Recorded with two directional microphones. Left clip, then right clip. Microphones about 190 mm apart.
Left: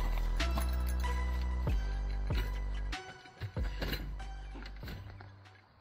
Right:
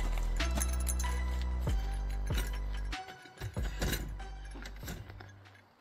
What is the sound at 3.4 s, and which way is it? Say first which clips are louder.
Music: right 2 dB; 60° right (ahead or behind).